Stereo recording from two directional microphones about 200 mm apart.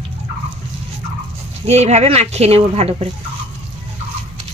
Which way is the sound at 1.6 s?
35° right (ahead or behind).